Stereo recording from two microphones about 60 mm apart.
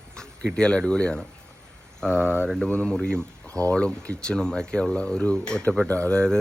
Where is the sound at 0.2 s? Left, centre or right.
Centre.